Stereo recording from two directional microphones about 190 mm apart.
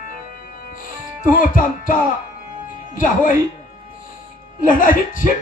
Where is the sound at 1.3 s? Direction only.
45° left (ahead or behind).